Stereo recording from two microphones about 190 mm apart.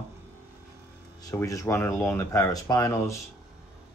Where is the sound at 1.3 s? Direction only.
15° left (ahead or behind).